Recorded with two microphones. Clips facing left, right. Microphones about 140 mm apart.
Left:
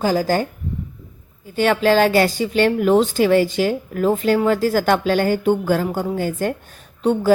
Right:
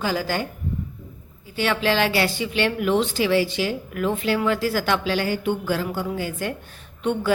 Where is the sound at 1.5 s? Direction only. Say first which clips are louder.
Left 6 dB; 45° left (ahead or behind).